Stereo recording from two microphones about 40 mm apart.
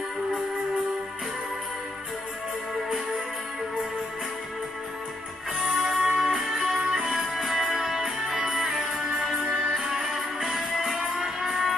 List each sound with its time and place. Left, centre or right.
5.8 s music: centre
9.4 s music: right; by 11.7 s centre